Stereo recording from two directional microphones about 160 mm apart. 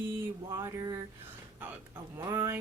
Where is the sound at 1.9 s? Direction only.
20° right (ahead or behind).